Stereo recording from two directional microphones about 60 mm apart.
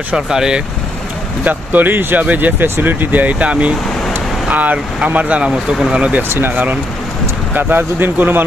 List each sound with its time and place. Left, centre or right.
0.1 s speech: centre
1.4 s speech: right
6.2 s speech: right